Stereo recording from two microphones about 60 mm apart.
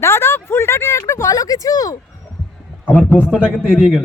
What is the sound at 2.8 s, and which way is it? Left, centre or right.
Speech, left.